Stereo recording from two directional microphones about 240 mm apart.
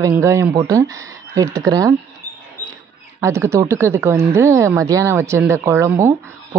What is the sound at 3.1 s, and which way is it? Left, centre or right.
Speech, centre.